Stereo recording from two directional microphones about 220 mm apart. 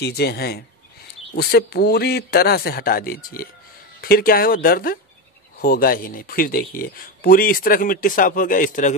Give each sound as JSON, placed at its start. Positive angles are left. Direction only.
{"t": 0.0, "sound": "speech", "side_deg": 45}